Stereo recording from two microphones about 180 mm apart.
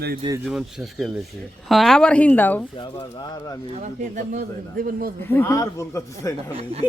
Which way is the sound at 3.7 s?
40° right (ahead or behind).